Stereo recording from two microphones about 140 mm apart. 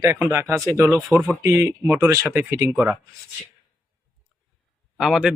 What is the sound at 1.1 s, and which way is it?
Speech, 5° right (ahead or behind).